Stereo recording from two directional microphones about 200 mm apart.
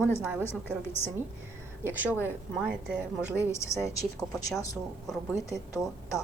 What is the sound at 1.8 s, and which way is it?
A woman's voice, 10° right (ahead or behind).